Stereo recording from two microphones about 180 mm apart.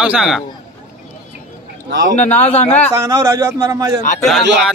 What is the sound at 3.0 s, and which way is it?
Speech, 15° right (ahead or behind).